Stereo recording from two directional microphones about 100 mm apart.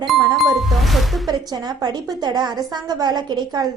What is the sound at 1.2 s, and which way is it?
A woman's voice, 40° right (ahead or behind).